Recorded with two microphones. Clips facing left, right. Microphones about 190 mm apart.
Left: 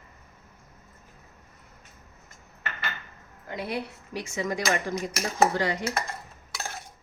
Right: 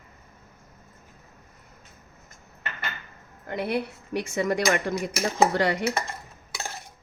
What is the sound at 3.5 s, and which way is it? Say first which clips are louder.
Speech: right 5 dB; 60° right (ahead or behind).